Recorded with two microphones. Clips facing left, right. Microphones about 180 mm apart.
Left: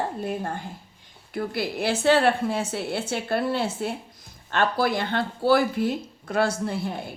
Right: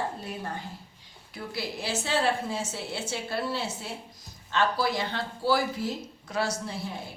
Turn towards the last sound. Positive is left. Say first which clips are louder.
# left 6 dB
turn(degrees=60)  # may be behind; listen again after turning